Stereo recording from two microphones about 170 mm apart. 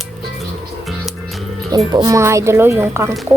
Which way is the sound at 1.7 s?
25° right (ahead or behind).